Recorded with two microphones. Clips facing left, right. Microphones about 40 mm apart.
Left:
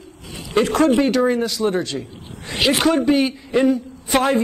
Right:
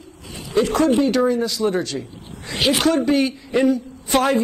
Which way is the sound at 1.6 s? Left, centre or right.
Centre.